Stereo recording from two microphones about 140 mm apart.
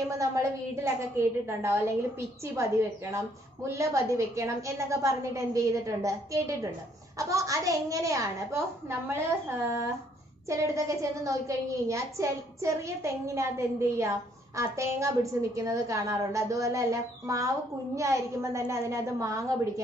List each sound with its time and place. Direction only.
0.1 s a woman's voice: 20° right (ahead or behind)
10.5 s a woman's voice: 20° right (ahead or behind)